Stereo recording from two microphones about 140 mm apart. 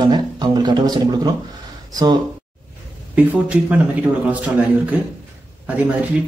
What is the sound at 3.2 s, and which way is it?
Speech, 10° right (ahead or behind).